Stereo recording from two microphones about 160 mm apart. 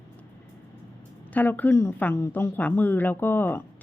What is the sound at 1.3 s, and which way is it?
Speech, 10° left (ahead or behind).